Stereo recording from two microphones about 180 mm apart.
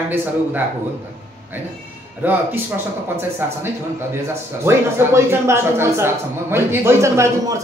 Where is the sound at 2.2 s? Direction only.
10° right (ahead or behind).